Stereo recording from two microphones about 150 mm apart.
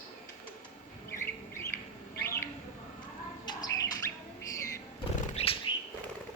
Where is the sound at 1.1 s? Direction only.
15° left (ahead or behind).